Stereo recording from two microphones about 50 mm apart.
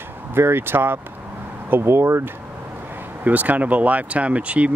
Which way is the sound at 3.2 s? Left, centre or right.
Right.